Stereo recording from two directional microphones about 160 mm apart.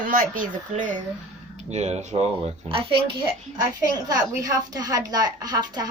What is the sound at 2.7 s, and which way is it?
Speech, 35° right (ahead or behind).